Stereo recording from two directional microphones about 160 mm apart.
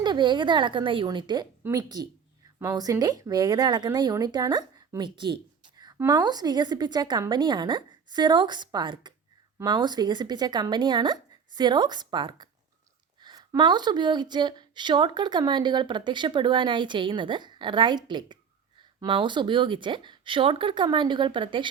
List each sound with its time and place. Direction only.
0.0 s speech: 30° right (ahead or behind)